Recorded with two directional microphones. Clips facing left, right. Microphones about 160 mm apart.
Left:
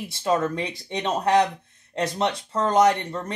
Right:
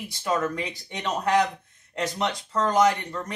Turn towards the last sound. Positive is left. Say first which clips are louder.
# left 2 dB
turn(degrees=25)  # may be behind; listen again after turning